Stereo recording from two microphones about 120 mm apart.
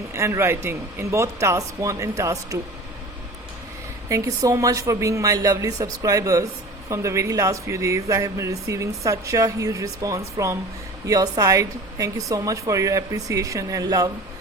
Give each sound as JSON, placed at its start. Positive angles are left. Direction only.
{"t": 0.1, "sound": "speech", "side_deg": -25}
{"t": 4.1, "sound": "speech", "side_deg": -30}